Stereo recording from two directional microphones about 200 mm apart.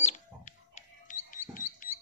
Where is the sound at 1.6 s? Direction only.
40° left (ahead or behind).